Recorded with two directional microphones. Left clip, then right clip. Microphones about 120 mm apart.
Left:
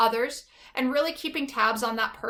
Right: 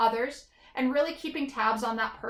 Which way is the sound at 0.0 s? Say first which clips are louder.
Left 2 dB; 20° left (ahead or behind).